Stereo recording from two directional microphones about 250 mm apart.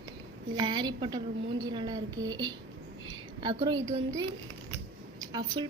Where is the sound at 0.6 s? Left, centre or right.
Centre.